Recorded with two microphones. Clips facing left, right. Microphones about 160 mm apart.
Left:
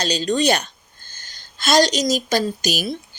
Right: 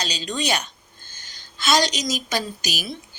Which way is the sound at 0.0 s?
45° left (ahead or behind).